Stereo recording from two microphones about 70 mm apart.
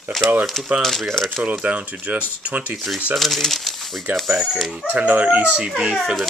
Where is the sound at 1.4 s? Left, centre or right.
Centre.